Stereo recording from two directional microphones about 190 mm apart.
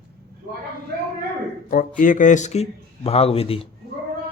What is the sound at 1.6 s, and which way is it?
Speech, 45° left (ahead or behind).